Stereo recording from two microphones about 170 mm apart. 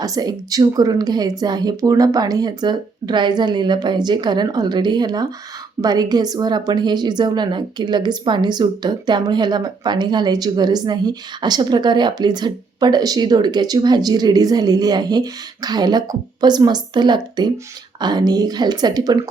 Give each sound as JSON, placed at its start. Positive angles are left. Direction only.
{"t": 0.0, "sound": "a woman's voice", "side_deg": -20}